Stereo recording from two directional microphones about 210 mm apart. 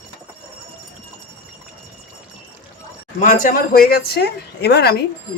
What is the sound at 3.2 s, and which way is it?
A woman's voice, 40° left (ahead or behind).